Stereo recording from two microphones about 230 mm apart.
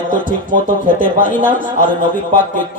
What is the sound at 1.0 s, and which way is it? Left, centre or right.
Speech, left.